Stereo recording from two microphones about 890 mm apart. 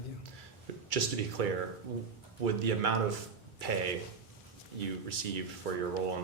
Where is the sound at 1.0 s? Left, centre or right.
Right.